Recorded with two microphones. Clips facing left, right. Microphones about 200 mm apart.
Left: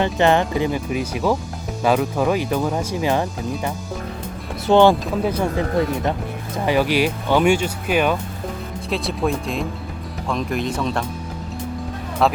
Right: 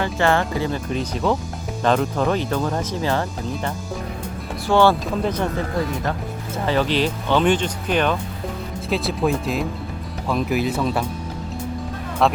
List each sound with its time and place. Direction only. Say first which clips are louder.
0.0 s speech: left 3 dB; 20° left (ahead or behind)
5.1 s speech: left 2 dB; 5° left (ahead or behind)
6.7 s speech: left 2 dB; 10° left (ahead or behind); by 11.0 s 5° right (ahead or behind)
12.2 s speech: even; centre (ahead or behind)